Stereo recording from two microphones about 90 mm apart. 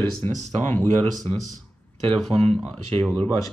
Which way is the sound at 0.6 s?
20° left (ahead or behind).